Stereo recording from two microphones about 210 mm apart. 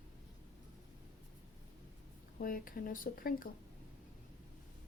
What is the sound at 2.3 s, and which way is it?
Speech, 40° left (ahead or behind).